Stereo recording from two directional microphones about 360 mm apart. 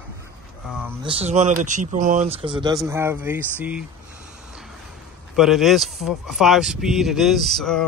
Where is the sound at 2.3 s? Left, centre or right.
Centre.